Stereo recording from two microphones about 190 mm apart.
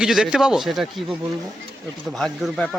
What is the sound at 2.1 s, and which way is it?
Speech, 5° left (ahead or behind).